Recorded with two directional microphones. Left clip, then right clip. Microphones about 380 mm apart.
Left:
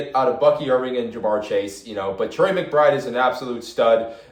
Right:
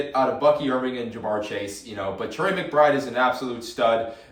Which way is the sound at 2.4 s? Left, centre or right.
Centre.